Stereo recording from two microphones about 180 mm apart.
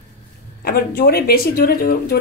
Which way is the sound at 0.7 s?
55° left (ahead or behind).